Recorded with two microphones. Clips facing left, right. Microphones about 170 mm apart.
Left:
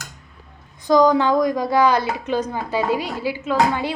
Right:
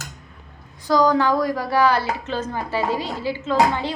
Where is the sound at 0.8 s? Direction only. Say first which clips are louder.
Left 3 dB; 20° left (ahead or behind).